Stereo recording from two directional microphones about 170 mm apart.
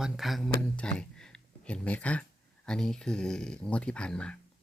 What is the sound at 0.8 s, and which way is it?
Speech, 5° left (ahead or behind).